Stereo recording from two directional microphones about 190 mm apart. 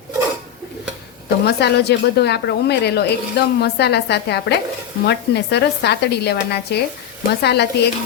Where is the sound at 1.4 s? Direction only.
60° left (ahead or behind).